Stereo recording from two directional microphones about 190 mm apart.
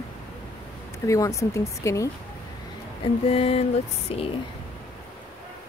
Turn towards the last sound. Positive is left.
turn(degrees=30)  # may be behind; listen again after turning